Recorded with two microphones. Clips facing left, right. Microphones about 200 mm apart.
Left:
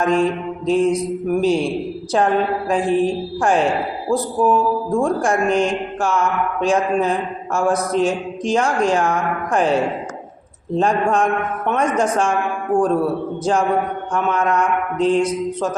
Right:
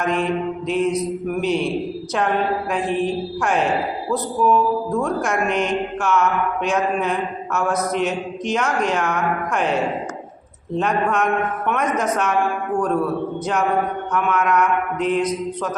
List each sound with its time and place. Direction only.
0.0 s mantra: 30° left (ahead or behind)
0.7 s a man's voice: 30° left (ahead or behind)
13.4 s a man's voice: 30° left (ahead or behind)